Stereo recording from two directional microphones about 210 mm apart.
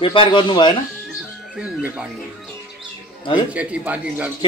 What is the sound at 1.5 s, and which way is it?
Speech, 5° right (ahead or behind).